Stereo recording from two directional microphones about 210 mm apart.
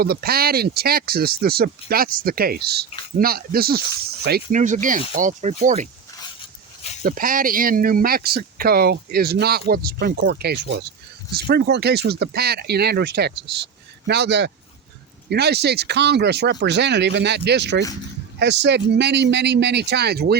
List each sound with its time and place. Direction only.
0.0 s speech: 45° right (ahead or behind)
7.0 s speech: 40° right (ahead or behind)